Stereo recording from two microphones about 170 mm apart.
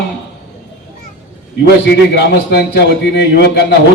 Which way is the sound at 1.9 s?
75° left (ahead or behind).